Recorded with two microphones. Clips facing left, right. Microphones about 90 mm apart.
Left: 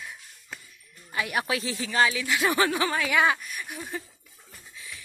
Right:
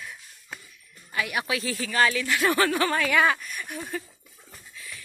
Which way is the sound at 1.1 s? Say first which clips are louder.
Even; 30° left (ahead or behind).